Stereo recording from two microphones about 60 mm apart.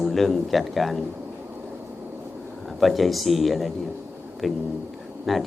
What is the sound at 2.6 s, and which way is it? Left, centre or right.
A man's voice, centre.